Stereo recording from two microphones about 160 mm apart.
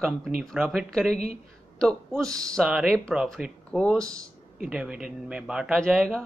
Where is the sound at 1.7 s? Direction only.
5° left (ahead or behind).